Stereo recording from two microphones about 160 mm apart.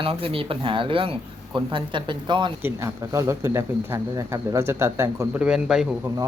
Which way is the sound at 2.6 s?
20° right (ahead or behind).